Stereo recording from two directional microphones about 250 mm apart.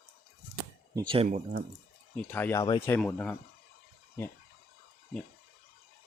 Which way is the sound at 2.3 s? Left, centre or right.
Centre.